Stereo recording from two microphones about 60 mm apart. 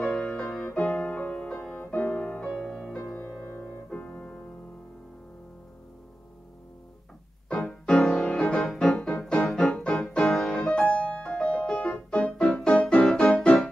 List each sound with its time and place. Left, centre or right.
0.0 s music: centre
2.6 s music: centre
3.4 s piano: left
7.5 s music: centre
10.8 s music: left